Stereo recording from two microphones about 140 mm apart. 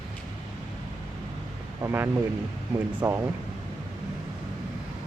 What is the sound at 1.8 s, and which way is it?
Speech, 15° right (ahead or behind).